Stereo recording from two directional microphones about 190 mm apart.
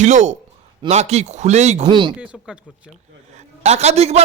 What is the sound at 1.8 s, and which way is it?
Speech, 25° right (ahead or behind).